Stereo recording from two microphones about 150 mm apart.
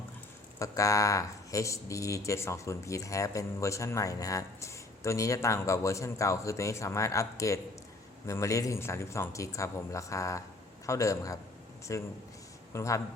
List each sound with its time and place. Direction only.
0.6 s speech: 20° left (ahead or behind)